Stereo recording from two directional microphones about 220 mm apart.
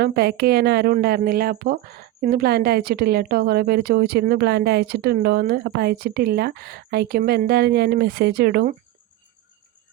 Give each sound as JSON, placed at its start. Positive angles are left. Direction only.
{"t": 0.0, "sound": "speech", "side_deg": -45}